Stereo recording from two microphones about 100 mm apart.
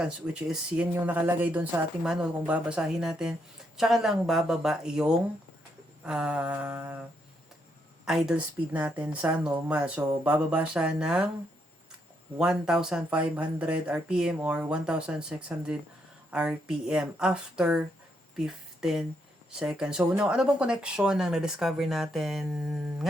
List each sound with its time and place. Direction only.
0.0 s speech: 5° right (ahead or behind)
1.0 s a woman's voice: 20° right (ahead or behind)
8.0 s speech: 5° right (ahead or behind)
8.7 s speech: 15° right (ahead or behind)
12.4 s speech: 5° right (ahead or behind)